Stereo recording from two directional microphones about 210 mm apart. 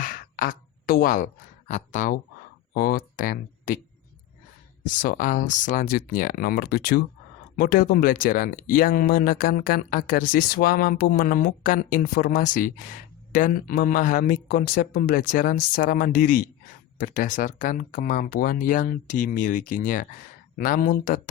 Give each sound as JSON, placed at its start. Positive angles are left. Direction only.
{"t": 0.0, "sound": "a sound", "side_deg": 40}
{"t": 2.7, "sound": "speech", "side_deg": 45}
{"t": 4.8, "sound": "speech", "side_deg": 40}